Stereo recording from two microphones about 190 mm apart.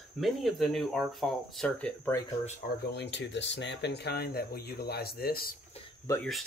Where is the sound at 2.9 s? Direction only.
65° left (ahead or behind).